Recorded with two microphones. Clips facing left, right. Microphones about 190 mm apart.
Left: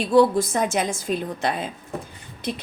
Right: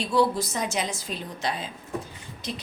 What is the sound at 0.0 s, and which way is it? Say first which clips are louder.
A woman's voice: left 6 dB; 55° left (ahead or behind).